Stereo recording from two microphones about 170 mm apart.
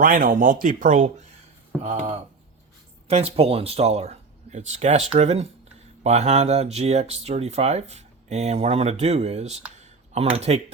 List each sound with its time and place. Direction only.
0.0 s speech: 55° right (ahead or behind)
1.8 s speech: 35° right (ahead or behind)
9.8 s a sound: 40° right (ahead or behind)